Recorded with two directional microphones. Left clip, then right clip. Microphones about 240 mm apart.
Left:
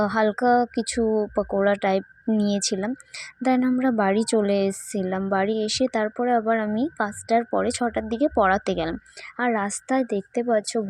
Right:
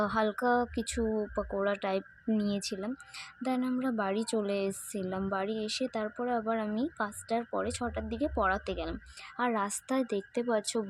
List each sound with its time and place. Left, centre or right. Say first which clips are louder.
0.0 s speech: left 8 dB; left